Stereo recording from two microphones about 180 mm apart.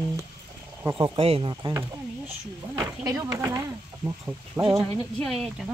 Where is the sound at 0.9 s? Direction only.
30° right (ahead or behind).